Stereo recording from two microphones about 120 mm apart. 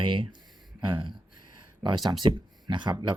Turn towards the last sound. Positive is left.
turn(degrees=-40)  # may be behind; listen again after turning